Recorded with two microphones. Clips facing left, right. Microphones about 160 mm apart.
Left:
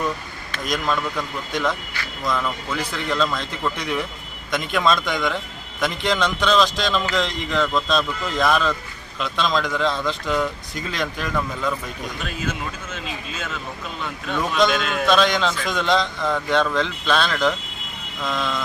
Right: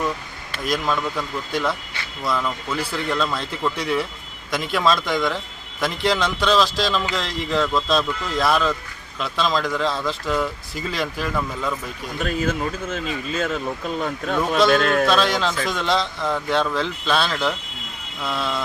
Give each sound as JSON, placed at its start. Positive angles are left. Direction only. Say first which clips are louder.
{"t": 0.5, "sound": "speech", "louder": "right 1 dB", "side_deg": -5}
{"t": 12.2, "sound": "speech", "louder": "right 7 dB", "side_deg": -50}
{"t": 15.0, "sound": "speech", "louder": "left 1 dB", "side_deg": -5}